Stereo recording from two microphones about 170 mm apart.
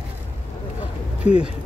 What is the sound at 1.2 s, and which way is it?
Speech, 5° right (ahead or behind).